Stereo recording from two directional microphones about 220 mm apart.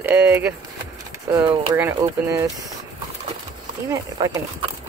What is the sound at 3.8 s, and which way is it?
Speech, 15° right (ahead or behind).